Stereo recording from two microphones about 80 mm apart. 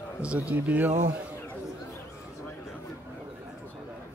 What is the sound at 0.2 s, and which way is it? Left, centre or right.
Speech, centre.